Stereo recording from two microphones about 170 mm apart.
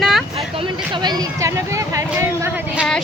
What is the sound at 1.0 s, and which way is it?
Speech, 20° right (ahead or behind).